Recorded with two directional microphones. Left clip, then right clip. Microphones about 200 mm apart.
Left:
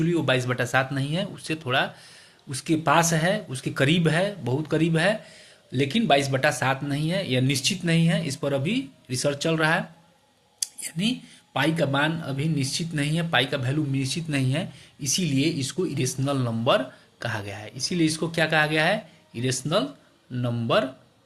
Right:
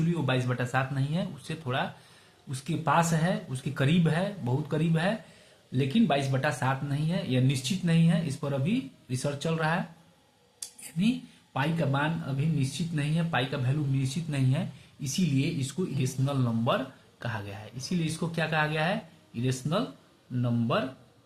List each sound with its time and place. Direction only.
0.1 s speech: 35° left (ahead or behind)
10.6 s a sound: 35° left (ahead or behind)
11.5 s speech: 35° left (ahead or behind)